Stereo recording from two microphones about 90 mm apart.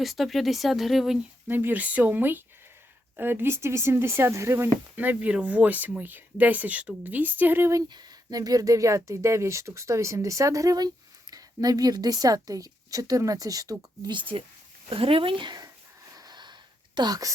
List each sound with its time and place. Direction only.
0.0 s speech: centre (ahead or behind)
1.5 s speech: 20° right (ahead or behind)
7.9 s speech: 50° right (ahead or behind)
14.1 s speech: 70° right (ahead or behind)
14.8 s speech: 90° right; by 15.5 s 70° right (ahead or behind)
16.1 s a sound: 50° right (ahead or behind)